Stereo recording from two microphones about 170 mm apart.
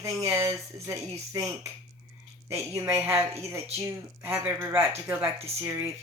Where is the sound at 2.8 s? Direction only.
10° right (ahead or behind).